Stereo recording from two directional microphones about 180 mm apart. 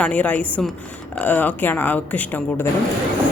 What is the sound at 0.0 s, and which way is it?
Speech, 5° left (ahead or behind).